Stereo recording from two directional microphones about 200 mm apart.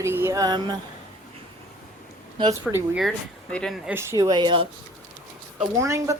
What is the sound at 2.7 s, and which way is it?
A woman's voice, 5° right (ahead or behind).